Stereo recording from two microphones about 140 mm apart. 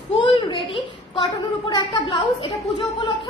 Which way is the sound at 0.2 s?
40° left (ahead or behind).